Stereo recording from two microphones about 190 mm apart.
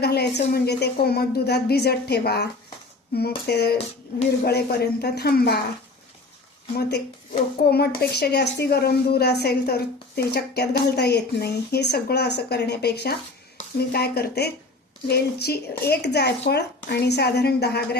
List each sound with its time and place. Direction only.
0.0 s a woman's voice: 60° left (ahead or behind)
6.7 s a woman's voice: 60° left (ahead or behind)